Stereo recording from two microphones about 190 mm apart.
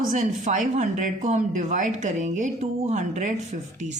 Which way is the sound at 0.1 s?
40° right (ahead or behind).